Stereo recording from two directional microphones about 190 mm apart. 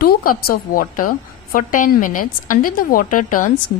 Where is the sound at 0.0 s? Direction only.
50° left (ahead or behind).